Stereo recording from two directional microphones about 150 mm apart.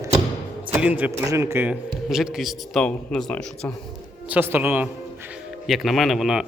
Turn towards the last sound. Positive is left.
turn(degrees=-5)  # may be behind; listen again after turning